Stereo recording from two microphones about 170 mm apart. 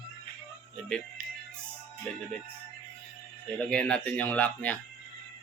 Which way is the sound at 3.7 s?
5° left (ahead or behind).